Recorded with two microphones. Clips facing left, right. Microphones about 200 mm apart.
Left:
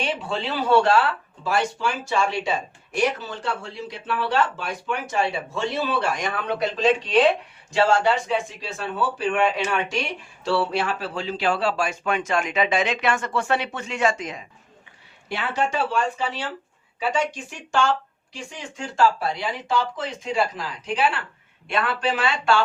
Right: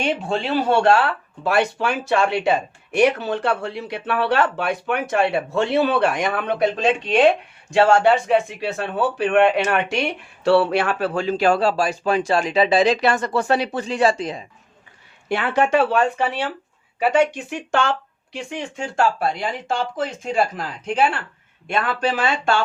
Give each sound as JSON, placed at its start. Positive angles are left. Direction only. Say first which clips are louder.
{"t": 0.0, "sound": "speech", "louder": "right 4 dB", "side_deg": -45}
{"t": 15.3, "sound": "speech", "louder": "right 7 dB", "side_deg": -60}